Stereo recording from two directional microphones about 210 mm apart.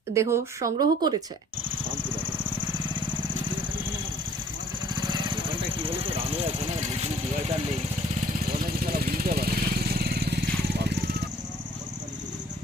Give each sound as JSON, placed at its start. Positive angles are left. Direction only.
{"t": 0.1, "sound": "speech", "side_deg": -15}
{"t": 4.9, "sound": "vehicle", "side_deg": -20}
{"t": 8.8, "sound": "vehicle", "side_deg": -45}